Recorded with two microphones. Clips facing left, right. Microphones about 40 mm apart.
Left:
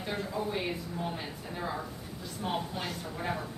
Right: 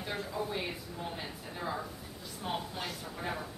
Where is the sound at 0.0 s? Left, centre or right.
Centre.